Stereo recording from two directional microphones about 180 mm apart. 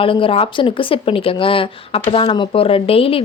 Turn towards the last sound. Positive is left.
turn(degrees=30)  # may be behind; listen again after turning